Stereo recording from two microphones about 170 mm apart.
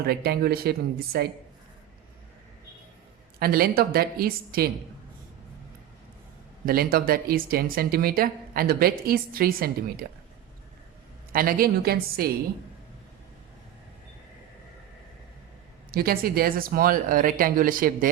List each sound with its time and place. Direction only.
0.0 s speech: 65° right (ahead or behind)
3.4 s speech: 60° right (ahead or behind)
6.7 s speech: 60° right (ahead or behind)
11.3 s speech: 55° right (ahead or behind)
15.9 s speech: 60° right (ahead or behind)